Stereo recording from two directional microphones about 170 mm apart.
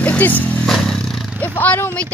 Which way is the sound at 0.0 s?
10° left (ahead or behind).